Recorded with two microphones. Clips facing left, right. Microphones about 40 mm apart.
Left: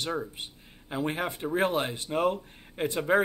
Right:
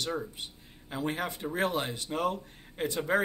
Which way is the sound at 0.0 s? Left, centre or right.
Left.